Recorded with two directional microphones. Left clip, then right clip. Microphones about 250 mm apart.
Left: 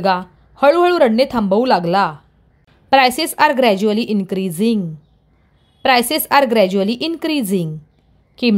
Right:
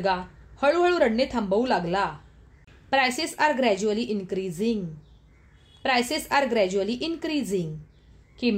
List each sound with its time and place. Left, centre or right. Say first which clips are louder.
0.0 s speech: left 9 dB; left